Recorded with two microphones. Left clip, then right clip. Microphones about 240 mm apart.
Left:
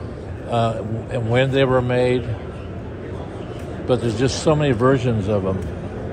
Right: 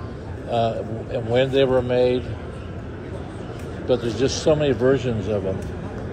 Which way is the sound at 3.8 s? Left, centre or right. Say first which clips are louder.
Left 1 dB; left.